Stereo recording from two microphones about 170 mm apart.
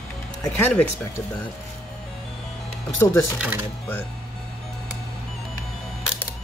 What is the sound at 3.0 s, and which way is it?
Speech, 15° left (ahead or behind).